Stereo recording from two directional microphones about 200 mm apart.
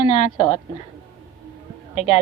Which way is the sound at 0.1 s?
30° left (ahead or behind).